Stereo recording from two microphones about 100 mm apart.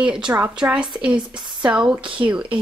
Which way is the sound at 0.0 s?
10° right (ahead or behind).